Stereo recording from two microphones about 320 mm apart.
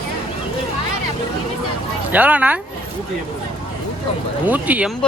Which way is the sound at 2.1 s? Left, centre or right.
Centre.